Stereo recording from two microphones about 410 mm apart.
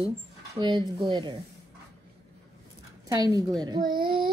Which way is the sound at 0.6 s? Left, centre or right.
Centre.